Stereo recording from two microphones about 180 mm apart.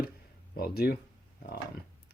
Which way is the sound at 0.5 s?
60° left (ahead or behind).